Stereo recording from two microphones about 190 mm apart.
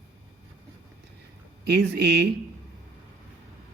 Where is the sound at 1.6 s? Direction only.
60° right (ahead or behind).